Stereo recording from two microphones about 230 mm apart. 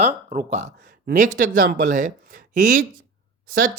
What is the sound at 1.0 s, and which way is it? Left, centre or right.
A woman's voice, right.